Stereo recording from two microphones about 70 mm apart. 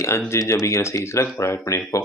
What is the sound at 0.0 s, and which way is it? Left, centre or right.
Speech, left.